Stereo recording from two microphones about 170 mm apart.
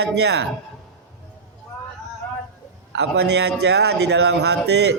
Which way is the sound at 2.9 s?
80° right.